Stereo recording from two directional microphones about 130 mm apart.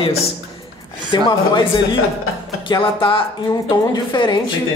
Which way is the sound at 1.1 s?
35° left (ahead or behind).